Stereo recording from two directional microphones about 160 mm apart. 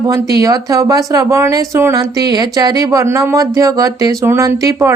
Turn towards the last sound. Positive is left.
turn(degrees=-20)  # may be behind; listen again after turning